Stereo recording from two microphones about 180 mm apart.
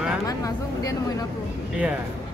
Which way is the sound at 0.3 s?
20° left (ahead or behind).